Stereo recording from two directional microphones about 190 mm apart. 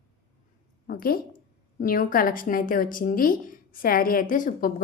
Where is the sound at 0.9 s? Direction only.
50° left (ahead or behind).